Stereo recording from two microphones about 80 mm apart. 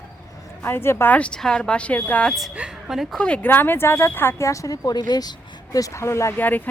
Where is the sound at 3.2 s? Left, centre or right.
Centre.